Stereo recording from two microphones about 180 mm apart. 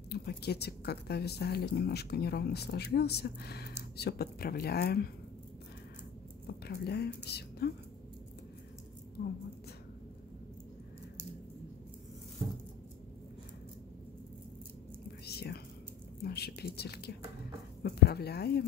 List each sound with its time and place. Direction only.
0.1 s a woman's voice: 65° left (ahead or behind)
6.4 s speech: 60° left (ahead or behind)
9.2 s a woman's voice: 60° left (ahead or behind)
15.2 s whispering: 60° left (ahead or behind)
16.3 s a woman's voice: 60° left (ahead or behind)